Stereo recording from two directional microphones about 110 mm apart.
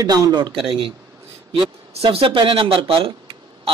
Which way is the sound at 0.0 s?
40° right (ahead or behind).